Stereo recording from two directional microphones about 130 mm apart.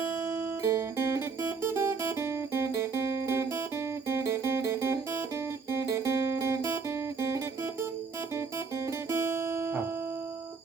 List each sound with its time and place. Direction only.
0.3 s music: 20° right (ahead or behind)
9.0 s music: 20° right (ahead or behind)